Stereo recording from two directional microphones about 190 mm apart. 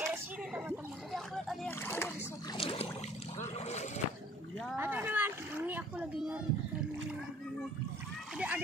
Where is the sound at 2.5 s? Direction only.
30° left (ahead or behind).